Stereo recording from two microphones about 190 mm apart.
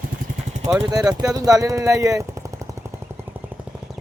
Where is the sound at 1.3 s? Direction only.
20° right (ahead or behind).